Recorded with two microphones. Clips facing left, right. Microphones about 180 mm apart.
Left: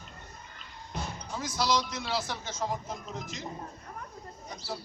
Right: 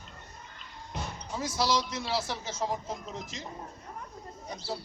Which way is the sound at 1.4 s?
30° right (ahead or behind).